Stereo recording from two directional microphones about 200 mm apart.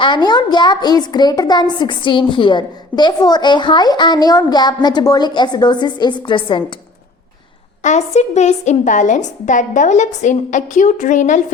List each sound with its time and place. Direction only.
0.0 s a woman's voice: 20° left (ahead or behind)
7.8 s a woman's voice: 35° left (ahead or behind)